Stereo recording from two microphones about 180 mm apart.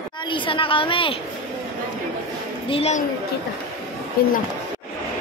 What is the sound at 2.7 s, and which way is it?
Speech, 35° left (ahead or behind).